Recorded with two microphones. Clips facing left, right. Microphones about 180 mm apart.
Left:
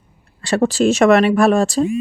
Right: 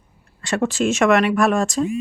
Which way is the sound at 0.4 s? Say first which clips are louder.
Left 5 dB; 35° left (ahead or behind).